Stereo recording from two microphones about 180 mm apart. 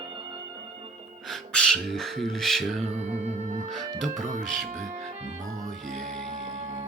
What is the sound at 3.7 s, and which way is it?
Speech, centre (ahead or behind).